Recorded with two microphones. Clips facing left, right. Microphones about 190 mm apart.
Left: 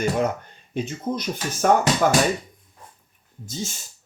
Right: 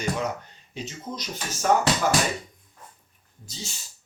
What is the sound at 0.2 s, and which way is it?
Speech, 55° left (ahead or behind).